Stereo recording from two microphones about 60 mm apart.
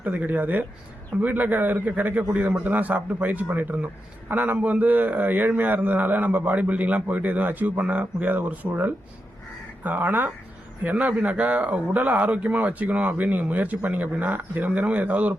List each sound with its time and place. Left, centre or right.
0.0 s a man's voice: right